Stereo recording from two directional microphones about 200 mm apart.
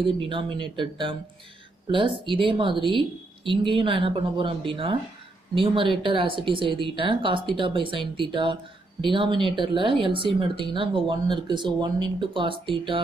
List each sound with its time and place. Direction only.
0.0 s speech: 25° right (ahead or behind)